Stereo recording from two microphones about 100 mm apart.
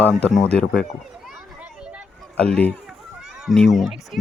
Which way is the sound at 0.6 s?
10° left (ahead or behind).